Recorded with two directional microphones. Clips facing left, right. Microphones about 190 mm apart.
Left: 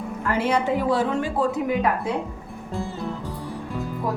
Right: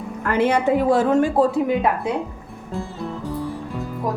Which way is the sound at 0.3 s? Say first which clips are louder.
Right 4 dB; 60° right (ahead or behind).